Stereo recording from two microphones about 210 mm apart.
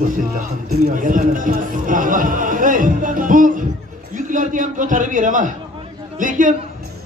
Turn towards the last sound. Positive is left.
turn(degrees=-40)  # may be behind; listen again after turning